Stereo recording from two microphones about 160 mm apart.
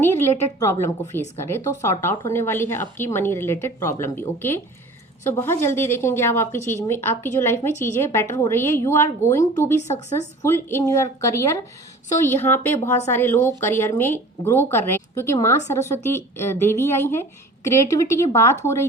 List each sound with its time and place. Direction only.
0.0 s a woman's voice: 15° left (ahead or behind)